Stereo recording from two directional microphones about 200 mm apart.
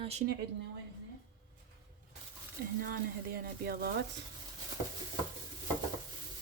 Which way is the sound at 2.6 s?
50° right (ahead or behind).